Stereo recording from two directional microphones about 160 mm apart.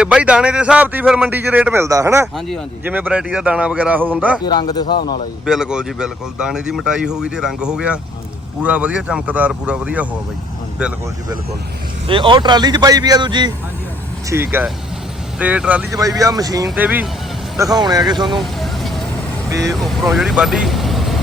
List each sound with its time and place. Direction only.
0.0 s speech: 5° right (ahead or behind)
2.2 s speech: centre (ahead or behind)
2.8 s speech: 10° right (ahead or behind)
4.4 s speech: 25° left (ahead or behind)
5.5 s speech: 5° right (ahead or behind)
12.0 s speech: 30° right (ahead or behind)
14.3 s speech: 15° right (ahead or behind)
15.9 s speech: 20° right (ahead or behind)
16.6 s speech: 10° right (ahead or behind)
17.6 s speech: 25° right (ahead or behind)
18.6 s vehicle: centre (ahead or behind)
19.5 s speech: 20° right (ahead or behind)
19.7 s speech: centre (ahead or behind)